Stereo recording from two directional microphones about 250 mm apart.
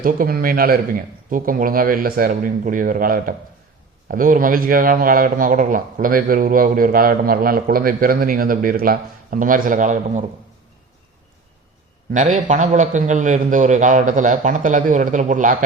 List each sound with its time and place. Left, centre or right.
0.0 s a man's voice: right
12.1 s a man's voice: right